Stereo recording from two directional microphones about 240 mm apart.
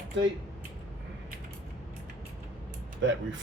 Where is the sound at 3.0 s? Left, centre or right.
Right.